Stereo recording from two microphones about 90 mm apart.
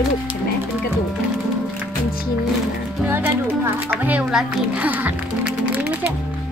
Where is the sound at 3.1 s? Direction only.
25° right (ahead or behind).